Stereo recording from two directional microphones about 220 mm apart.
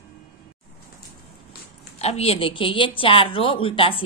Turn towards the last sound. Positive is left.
turn(degrees=25)  # may be behind; listen again after turning